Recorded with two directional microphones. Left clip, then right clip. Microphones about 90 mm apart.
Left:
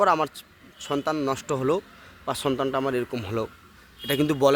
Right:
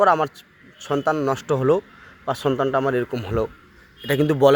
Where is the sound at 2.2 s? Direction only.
15° left (ahead or behind).